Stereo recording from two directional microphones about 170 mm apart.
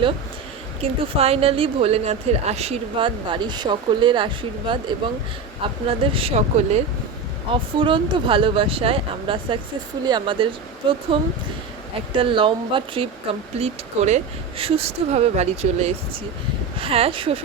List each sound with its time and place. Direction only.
0.8 s speech: 35° right (ahead or behind)
6.1 s speech: 35° right (ahead or behind)
13.6 s speech: 40° right (ahead or behind)